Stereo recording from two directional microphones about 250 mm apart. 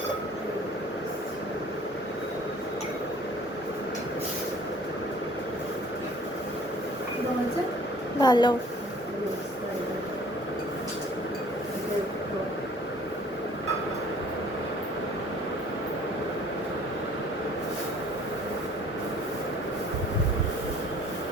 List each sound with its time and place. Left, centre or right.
8.2 s a woman's voice: centre